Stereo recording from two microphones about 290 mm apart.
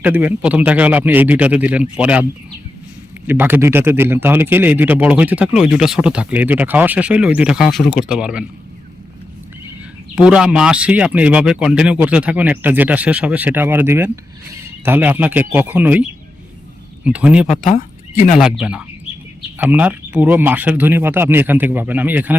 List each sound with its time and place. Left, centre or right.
0.0 s a man's voice: centre
3.2 s a man's voice: centre
10.2 s a man's voice: centre
17.6 s speech: left
18.3 s a man's voice: centre